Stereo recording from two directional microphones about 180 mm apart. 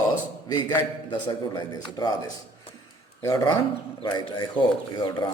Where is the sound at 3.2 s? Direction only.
20° left (ahead or behind).